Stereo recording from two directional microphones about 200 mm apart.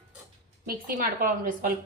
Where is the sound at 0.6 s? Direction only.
45° right (ahead or behind).